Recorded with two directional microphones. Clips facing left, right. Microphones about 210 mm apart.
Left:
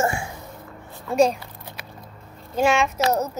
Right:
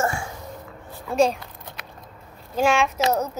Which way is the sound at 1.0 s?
Centre (ahead or behind).